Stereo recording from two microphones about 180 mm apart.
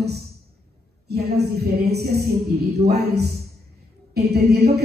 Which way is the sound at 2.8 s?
35° right (ahead or behind).